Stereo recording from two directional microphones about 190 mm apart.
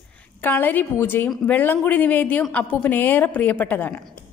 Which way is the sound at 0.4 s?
10° left (ahead or behind).